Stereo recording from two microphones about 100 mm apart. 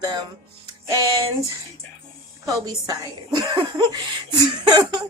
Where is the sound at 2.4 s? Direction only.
35° right (ahead or behind).